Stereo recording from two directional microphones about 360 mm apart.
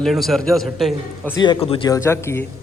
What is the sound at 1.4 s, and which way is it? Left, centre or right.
Speech, centre.